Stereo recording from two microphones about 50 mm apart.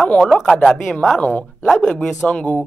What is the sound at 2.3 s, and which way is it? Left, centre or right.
Speech, left.